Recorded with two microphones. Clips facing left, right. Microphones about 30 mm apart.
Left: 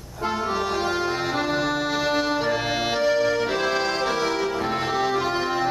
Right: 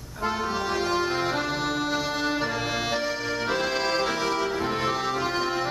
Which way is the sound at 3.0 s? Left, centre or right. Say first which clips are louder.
Left 7 dB; centre.